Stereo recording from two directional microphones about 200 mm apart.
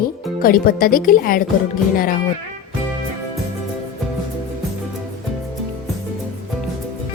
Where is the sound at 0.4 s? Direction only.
45° left (ahead or behind).